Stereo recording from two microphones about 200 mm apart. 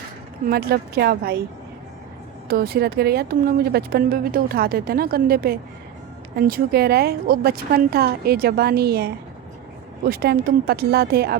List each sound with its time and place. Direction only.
0.4 s speech: 50° right (ahead or behind)
2.5 s speech: 50° right (ahead or behind)